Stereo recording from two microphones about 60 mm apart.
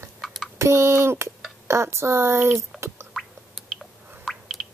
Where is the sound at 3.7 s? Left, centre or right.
Centre.